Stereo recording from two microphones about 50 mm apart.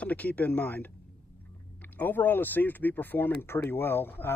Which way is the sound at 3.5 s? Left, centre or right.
Left.